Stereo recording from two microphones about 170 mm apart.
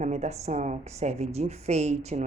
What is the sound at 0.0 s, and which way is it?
A woman's voice, 40° right (ahead or behind).